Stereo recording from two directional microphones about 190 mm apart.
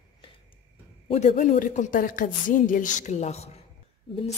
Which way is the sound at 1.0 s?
35° left (ahead or behind).